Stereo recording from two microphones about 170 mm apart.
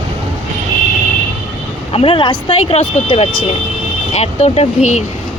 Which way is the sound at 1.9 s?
35° left (ahead or behind).